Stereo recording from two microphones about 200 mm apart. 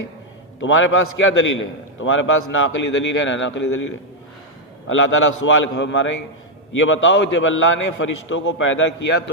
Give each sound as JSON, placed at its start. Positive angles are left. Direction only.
{"t": 0.6, "sound": "a man's voice", "side_deg": 75}
{"t": 4.9, "sound": "a man's voice", "side_deg": 75}